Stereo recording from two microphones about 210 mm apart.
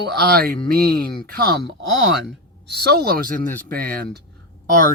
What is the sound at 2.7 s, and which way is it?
Speech, 50° right (ahead or behind).